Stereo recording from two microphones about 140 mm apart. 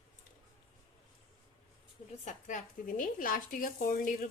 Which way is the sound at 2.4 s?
70° left (ahead or behind).